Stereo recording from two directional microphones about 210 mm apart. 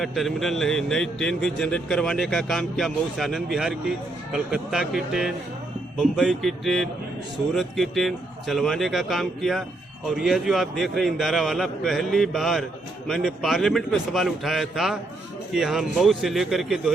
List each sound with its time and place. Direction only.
0.0 s speech: centre (ahead or behind)